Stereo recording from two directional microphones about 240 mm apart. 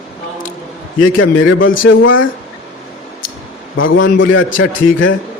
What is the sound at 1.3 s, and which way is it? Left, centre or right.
Speech, left.